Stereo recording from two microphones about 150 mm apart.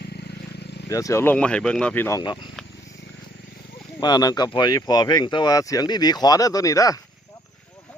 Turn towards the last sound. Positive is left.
turn(degrees=25)  # may be behind; listen again after turning